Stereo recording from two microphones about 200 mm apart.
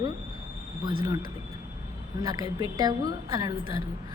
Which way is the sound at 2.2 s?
20° right (ahead or behind).